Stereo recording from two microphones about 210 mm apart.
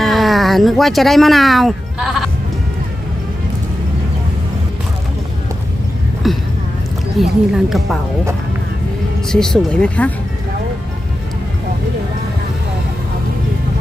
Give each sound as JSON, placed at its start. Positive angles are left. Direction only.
{"t": 0.0, "sound": "speech", "side_deg": 0}
{"t": 6.3, "sound": "a woman's voice", "side_deg": 0}
{"t": 9.3, "sound": "a woman's voice", "side_deg": 0}